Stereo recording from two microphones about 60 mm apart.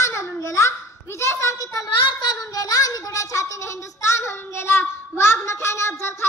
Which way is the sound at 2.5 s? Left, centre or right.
Left.